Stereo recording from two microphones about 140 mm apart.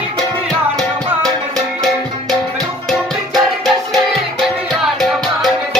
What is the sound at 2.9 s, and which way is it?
Music, centre (ahead or behind).